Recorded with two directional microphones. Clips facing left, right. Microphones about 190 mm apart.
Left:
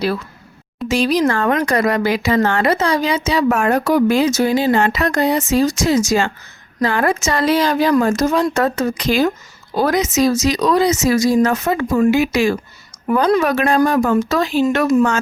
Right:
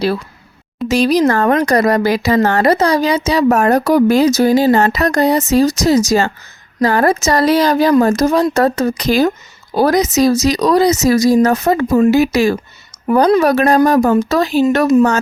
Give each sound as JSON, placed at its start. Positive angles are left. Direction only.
{"t": 0.9, "sound": "speech", "side_deg": -40}